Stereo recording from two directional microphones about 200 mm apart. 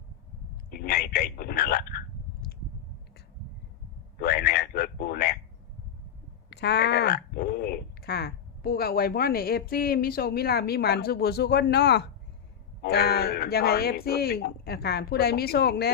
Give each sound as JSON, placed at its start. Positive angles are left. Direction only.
{"t": 0.7, "sound": "telephone", "side_deg": 50}
{"t": 4.2, "sound": "a sound", "side_deg": 50}
{"t": 6.5, "sound": "speech", "side_deg": 60}